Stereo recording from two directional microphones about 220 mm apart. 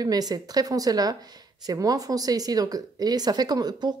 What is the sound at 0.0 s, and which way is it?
A woman's voice, 15° right (ahead or behind).